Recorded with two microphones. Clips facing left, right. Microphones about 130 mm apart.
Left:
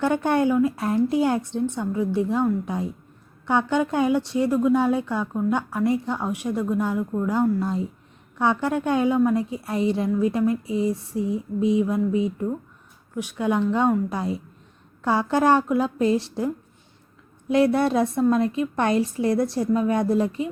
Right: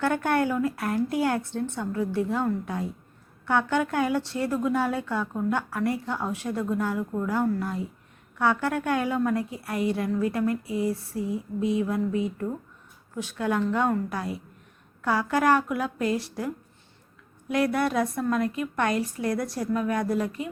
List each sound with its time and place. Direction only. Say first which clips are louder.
0.0 s a woman's voice: left 3 dB; 20° left (ahead or behind)
17.5 s speech: left 5 dB; 25° left (ahead or behind)